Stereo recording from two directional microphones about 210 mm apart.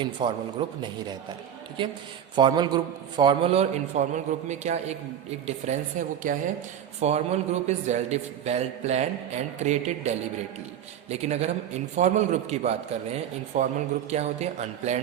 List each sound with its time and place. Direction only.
0.0 s a man's voice: 20° right (ahead or behind)
2.3 s a man's voice: 20° right (ahead or behind)
11.1 s a man's voice: 30° right (ahead or behind)